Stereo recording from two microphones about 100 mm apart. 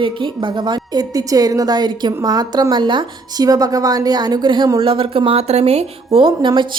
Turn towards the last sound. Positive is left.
turn(degrees=-60)  # may be behind; listen again after turning